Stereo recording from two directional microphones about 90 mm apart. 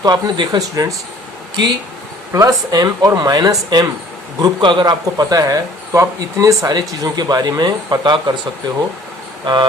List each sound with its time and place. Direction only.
0.0 s speech: 50° right (ahead or behind)
2.3 s a man's voice: 35° right (ahead or behind)
6.7 s speech: 50° right (ahead or behind)